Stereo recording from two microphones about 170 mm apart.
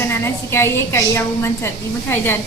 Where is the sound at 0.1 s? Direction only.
15° left (ahead or behind).